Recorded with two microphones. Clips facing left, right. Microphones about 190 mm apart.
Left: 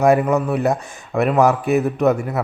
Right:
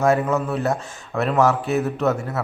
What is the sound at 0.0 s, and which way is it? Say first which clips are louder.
A man's voice: left 4 dB; 15° left (ahead or behind).